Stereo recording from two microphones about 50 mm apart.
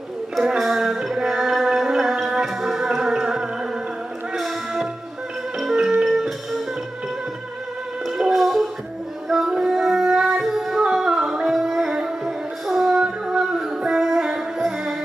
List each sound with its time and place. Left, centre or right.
0.3 s music: centre
6.0 s music: centre
8.2 s music: centre
9.5 s music: centre
10.4 s female singing: centre
10.8 s music: centre